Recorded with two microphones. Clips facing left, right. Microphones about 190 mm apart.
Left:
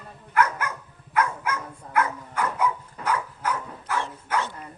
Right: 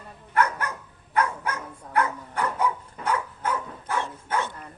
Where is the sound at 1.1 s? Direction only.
35° right (ahead or behind).